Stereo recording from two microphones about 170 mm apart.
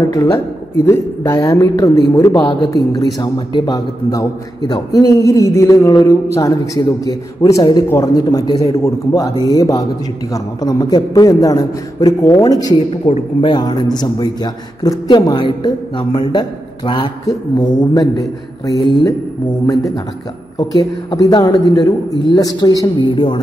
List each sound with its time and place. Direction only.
0.8 s a man's voice: 15° left (ahead or behind)
20.5 s a man's voice: 20° left (ahead or behind)